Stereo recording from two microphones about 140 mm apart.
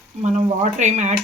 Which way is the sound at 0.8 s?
60° right (ahead or behind).